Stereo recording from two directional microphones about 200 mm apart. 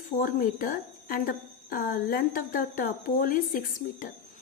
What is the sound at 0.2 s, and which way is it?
A woman's voice, 45° left (ahead or behind).